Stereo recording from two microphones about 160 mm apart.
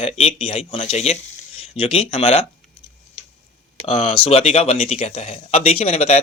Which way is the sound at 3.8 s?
35° left (ahead or behind).